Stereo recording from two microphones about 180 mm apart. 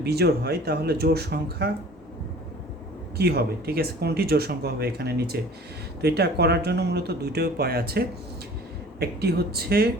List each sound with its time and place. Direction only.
0.0 s speech: 65° right (ahead or behind)
3.2 s speech: 60° right (ahead or behind)